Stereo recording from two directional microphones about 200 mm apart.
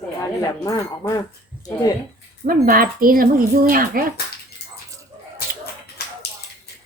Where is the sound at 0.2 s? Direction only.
15° left (ahead or behind).